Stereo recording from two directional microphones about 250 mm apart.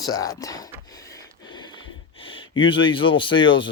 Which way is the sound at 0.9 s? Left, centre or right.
Centre.